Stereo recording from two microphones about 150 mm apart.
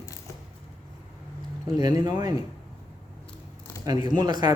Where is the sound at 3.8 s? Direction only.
25° right (ahead or behind).